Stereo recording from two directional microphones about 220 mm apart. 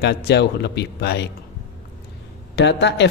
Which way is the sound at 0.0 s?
50° left (ahead or behind).